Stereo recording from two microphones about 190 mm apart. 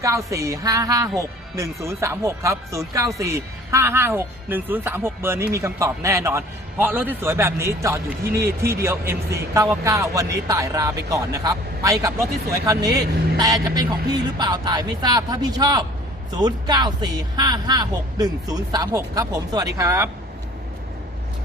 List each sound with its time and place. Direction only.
0.0 s speech: 15° right (ahead or behind)